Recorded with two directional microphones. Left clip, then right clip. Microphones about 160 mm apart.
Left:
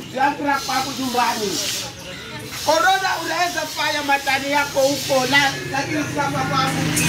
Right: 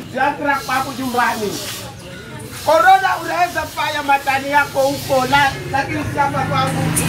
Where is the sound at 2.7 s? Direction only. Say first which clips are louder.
Right 6 dB; 10° right (ahead or behind).